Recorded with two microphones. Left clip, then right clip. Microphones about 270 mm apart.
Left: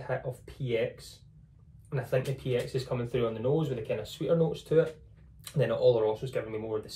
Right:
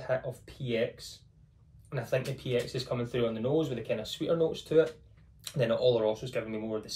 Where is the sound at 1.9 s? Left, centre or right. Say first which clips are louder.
Left 1 dB; centre.